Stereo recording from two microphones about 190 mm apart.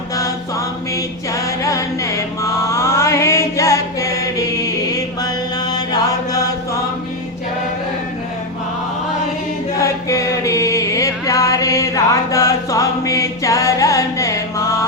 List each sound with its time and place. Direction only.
1.3 s mantra: 15° left (ahead or behind)
9.8 s mantra: 15° left (ahead or behind)